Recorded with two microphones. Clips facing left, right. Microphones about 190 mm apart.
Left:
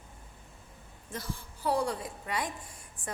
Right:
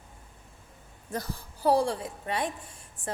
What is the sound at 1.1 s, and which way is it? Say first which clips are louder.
A woman's voice: right 5 dB; 40° right (ahead or behind).